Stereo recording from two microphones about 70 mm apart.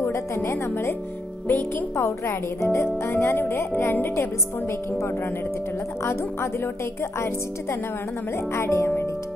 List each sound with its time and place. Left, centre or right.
0.0 s speech: left
6.0 s speech: left
8.4 s speech: left